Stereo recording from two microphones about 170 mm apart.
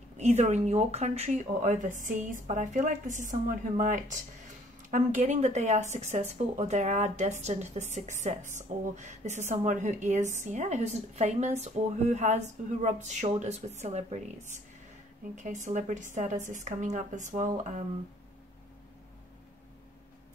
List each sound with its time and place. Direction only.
0.2 s speech: 40° right (ahead or behind)